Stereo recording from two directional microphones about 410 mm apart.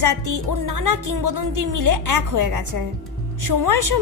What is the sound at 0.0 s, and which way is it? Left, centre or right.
A woman's voice, right.